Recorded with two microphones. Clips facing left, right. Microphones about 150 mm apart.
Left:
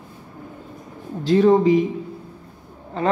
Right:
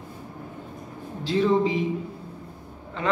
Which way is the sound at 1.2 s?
45° left (ahead or behind).